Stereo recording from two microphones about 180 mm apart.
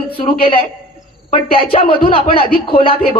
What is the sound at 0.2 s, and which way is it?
Speech, 30° left (ahead or behind).